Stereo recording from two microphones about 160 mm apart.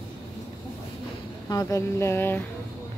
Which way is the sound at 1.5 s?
20° left (ahead or behind).